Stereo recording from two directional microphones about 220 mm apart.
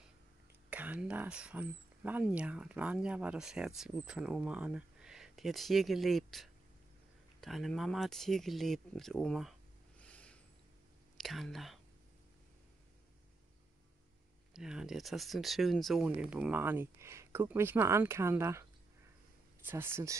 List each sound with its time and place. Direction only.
0.7 s speech: 5° right (ahead or behind)
14.5 s speech: 5° right (ahead or behind)